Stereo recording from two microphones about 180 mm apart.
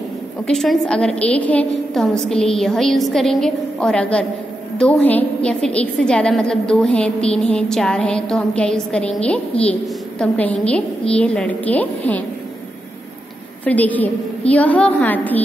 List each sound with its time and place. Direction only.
0.5 s a woman's voice: centre (ahead or behind)
13.7 s a woman's voice: 10° left (ahead or behind)